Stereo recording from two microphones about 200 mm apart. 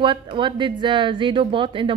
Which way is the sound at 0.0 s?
25° right (ahead or behind).